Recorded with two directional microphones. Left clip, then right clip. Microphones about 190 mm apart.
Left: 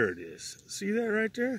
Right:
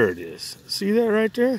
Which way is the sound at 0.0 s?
Centre (ahead or behind).